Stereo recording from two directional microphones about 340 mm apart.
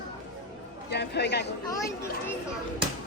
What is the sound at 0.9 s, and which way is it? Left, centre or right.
Speech, left.